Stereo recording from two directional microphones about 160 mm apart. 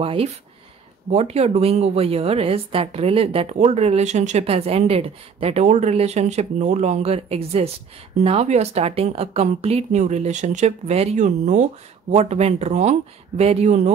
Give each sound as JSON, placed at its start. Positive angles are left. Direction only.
{"t": 0.0, "sound": "a woman's voice", "side_deg": -35}